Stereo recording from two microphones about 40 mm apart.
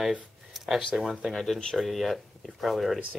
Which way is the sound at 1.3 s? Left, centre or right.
Centre.